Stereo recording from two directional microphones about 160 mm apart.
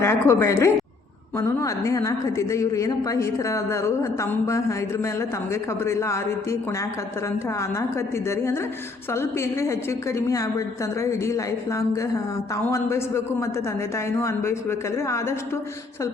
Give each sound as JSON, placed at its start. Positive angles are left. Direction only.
{"t": 0.0, "sound": "a woman's voice", "side_deg": 15}
{"t": 5.8, "sound": "speech", "side_deg": 15}
{"t": 10.2, "sound": "a woman's voice", "side_deg": 20}
{"t": 12.7, "sound": "speech", "side_deg": 15}